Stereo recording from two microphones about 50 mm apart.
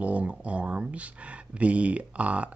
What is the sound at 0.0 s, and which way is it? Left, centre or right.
Speech, right.